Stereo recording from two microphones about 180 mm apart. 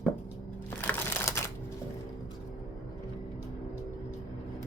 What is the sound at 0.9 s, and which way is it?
Crumpling, 15° left (ahead or behind).